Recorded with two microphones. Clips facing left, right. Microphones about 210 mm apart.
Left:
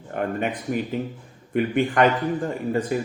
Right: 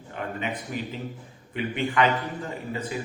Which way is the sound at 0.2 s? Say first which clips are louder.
Left 6 dB; 50° left (ahead or behind).